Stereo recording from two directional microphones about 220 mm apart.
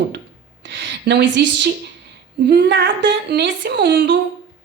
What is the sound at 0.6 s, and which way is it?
A woman's voice, 55° right (ahead or behind).